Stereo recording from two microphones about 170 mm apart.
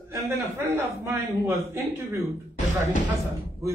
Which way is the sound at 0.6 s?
15° right (ahead or behind).